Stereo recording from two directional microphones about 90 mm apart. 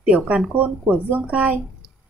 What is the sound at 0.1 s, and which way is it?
A woman's voice, 15° right (ahead or behind).